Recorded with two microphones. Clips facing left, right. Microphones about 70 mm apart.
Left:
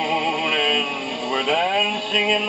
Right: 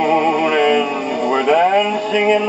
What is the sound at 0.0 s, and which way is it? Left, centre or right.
Music, right.